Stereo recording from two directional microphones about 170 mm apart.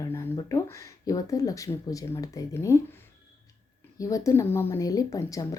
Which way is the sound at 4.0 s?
20° left (ahead or behind).